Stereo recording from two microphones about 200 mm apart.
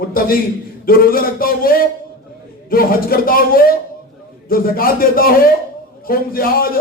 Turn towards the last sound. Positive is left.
turn(degrees=45)  # may be behind; listen again after turning